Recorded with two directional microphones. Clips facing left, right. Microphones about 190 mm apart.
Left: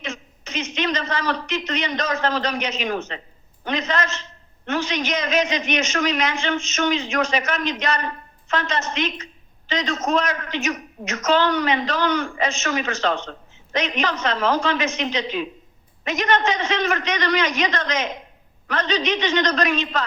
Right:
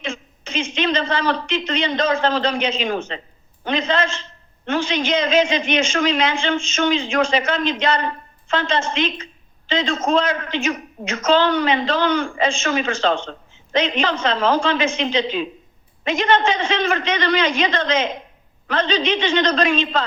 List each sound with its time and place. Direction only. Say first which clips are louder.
0.0 s a man's voice: right 3 dB; 30° right (ahead or behind)